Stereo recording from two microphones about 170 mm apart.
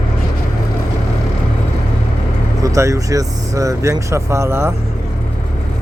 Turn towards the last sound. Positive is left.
turn(degrees=-15)  # may be behind; listen again after turning